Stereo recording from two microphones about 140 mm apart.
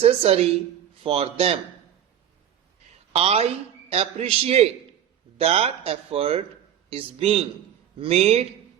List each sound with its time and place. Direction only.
0.0 s a man's voice: 45° right (ahead or behind)
3.1 s a man's voice: 45° right (ahead or behind)